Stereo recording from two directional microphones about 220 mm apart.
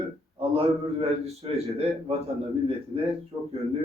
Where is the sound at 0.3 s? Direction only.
25° right (ahead or behind).